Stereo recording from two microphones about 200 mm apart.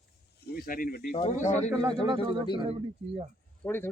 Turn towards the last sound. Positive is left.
turn(degrees=5)  # may be behind; listen again after turning